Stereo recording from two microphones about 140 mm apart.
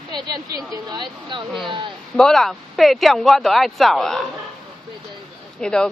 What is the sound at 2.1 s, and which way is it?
A woman's voice, 5° left (ahead or behind).